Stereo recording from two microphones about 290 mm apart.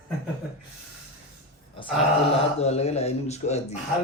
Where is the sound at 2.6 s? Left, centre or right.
Left.